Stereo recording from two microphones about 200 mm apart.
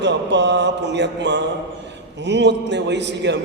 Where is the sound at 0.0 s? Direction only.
60° right (ahead or behind).